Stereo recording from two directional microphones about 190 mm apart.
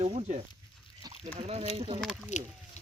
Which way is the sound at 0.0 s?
30° right (ahead or behind).